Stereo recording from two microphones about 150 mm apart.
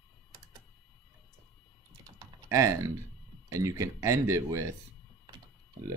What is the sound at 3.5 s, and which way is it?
Speech, 20° right (ahead or behind).